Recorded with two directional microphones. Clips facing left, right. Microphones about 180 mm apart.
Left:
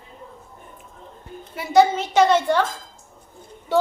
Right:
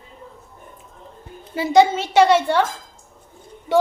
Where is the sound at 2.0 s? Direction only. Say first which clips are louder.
Right 2 dB; 10° right (ahead or behind).